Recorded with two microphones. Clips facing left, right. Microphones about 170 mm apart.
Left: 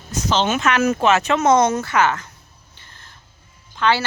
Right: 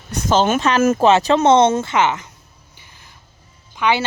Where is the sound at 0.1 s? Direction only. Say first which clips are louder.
Right 4 dB; 50° right (ahead or behind).